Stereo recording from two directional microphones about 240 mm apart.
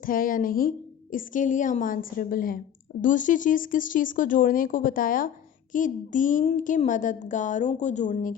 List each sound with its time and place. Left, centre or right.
0.0 s a woman's voice: left